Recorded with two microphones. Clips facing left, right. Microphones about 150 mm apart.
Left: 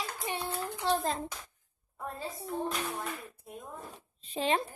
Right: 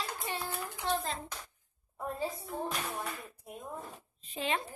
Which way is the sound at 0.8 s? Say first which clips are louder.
Left 4 dB; 45° left (ahead or behind).